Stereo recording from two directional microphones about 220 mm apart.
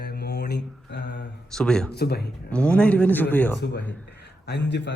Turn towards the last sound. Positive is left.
turn(degrees=50)  # may be behind; listen again after turning